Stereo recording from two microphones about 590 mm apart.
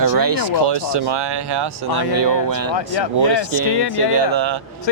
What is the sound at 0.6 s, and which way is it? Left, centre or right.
Speech, right.